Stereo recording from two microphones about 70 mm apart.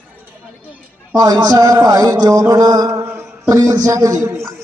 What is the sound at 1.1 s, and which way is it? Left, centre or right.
A man's voice, right.